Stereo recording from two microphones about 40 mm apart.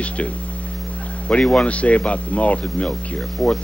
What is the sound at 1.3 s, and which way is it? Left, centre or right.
Speech, left.